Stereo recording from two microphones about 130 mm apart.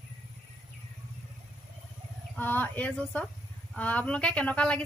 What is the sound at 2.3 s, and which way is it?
Speech, 15° left (ahead or behind).